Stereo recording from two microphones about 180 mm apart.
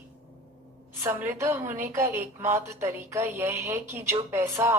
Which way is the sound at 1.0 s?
15° right (ahead or behind).